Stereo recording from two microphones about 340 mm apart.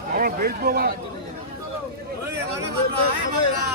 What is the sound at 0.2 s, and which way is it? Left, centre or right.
Speech, right.